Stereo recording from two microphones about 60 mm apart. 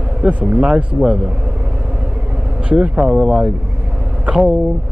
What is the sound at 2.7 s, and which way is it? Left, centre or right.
Speech, centre.